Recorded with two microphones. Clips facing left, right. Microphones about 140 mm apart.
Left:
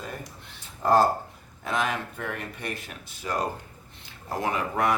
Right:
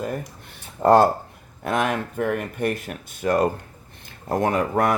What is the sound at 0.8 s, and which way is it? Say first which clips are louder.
Speech: right 6 dB; 70° right (ahead or behind).